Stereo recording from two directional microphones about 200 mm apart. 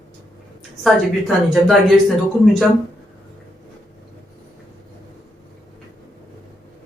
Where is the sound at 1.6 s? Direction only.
Centre (ahead or behind).